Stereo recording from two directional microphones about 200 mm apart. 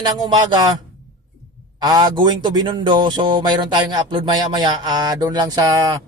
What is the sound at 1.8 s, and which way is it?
Speech, 20° right (ahead or behind).